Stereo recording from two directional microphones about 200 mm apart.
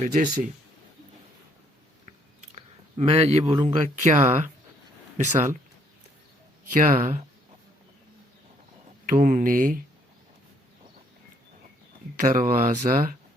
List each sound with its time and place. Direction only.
0.0 s speech: 40° right (ahead or behind)
2.6 s speech: 30° right (ahead or behind)
6.7 s speech: 40° right (ahead or behind)
9.0 s speech: 40° right (ahead or behind)
12.2 s speech: 40° right (ahead or behind)